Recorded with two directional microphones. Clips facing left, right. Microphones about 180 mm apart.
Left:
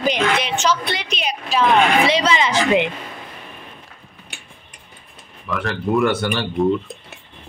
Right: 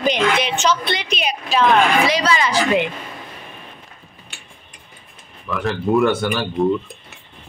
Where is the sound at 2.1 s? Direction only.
25° left (ahead or behind).